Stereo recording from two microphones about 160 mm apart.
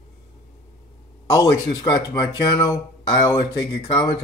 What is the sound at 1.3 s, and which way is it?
Speech, 25° left (ahead or behind).